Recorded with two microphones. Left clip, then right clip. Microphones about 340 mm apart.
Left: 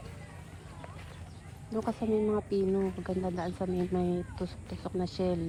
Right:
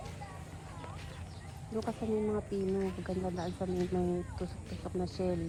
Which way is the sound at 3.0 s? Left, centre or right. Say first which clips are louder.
Left 3 dB; left.